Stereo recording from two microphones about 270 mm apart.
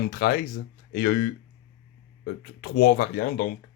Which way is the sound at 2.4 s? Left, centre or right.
Left.